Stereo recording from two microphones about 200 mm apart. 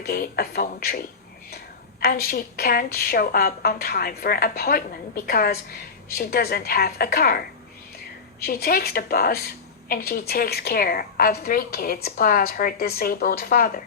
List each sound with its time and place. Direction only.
0.0 s a woman's voice: 50° left (ahead or behind)
8.4 s a woman's voice: 50° left (ahead or behind)